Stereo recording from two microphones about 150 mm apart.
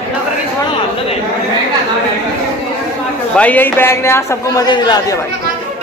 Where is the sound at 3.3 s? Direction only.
10° left (ahead or behind); by 5.1 s 30° left (ahead or behind).